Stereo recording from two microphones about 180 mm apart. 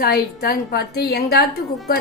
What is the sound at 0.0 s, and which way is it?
A woman's voice, 60° left (ahead or behind).